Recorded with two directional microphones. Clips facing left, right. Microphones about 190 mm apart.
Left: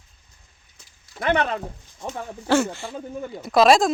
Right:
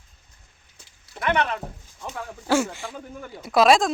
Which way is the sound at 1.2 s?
35° left (ahead or behind).